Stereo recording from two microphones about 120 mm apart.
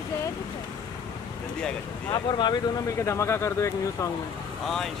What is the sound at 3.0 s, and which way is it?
Speech, 25° left (ahead or behind).